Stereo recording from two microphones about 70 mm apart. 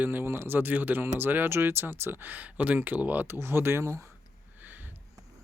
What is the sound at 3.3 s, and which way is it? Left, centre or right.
Speech, right.